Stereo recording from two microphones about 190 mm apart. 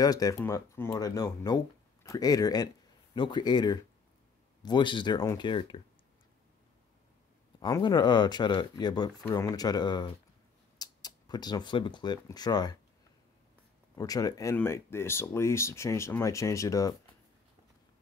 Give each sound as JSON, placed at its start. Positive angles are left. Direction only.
{"t": 0.0, "sound": "speech", "side_deg": 20}
{"t": 7.6, "sound": "speech", "side_deg": 20}
{"t": 13.9, "sound": "speech", "side_deg": 20}